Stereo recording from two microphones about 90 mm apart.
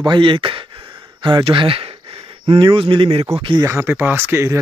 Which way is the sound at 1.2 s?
65° right (ahead or behind).